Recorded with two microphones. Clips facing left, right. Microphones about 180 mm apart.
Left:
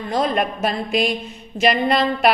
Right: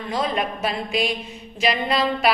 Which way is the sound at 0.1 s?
45° left (ahead or behind).